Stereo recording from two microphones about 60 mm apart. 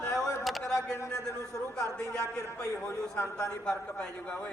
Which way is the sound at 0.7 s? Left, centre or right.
Left.